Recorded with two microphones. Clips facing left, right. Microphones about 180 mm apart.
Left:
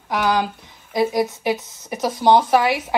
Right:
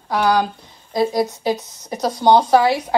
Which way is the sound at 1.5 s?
15° right (ahead or behind).